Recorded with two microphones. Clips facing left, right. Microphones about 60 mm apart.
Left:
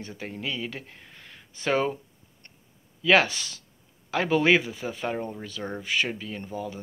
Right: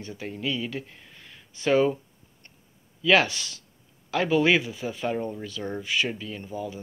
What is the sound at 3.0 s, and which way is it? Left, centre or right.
Speech, left.